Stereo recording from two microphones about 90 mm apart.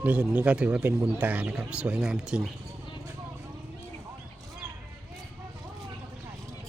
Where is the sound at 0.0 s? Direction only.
15° right (ahead or behind).